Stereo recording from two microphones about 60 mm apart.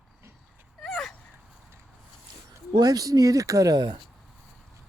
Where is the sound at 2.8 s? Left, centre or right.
Right.